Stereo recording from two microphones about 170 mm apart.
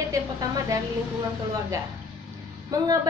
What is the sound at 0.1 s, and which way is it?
Speech, 20° right (ahead or behind).